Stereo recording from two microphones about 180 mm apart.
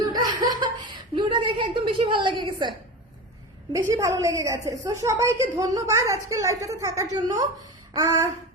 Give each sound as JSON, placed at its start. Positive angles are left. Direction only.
{"t": 0.1, "sound": "laughter", "side_deg": -20}
{"t": 1.1, "sound": "a sound", "side_deg": -25}
{"t": 3.7, "sound": "a woman's voice", "side_deg": -15}